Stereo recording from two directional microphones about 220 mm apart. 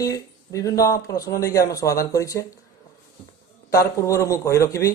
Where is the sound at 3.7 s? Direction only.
15° left (ahead or behind).